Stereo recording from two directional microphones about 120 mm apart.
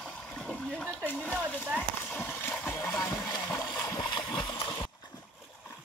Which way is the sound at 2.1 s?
15° left (ahead or behind).